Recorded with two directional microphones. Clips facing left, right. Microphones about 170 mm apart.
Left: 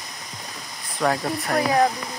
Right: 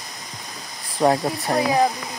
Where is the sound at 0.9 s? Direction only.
25° right (ahead or behind).